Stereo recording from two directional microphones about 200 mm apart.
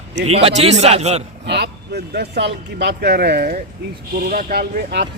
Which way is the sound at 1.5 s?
55° right (ahead or behind).